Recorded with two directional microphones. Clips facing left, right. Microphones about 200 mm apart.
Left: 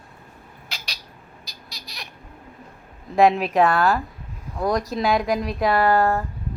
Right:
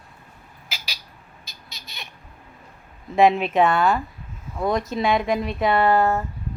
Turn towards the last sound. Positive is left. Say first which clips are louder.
# even
turn(degrees=0)  # may be behind; listen again after turning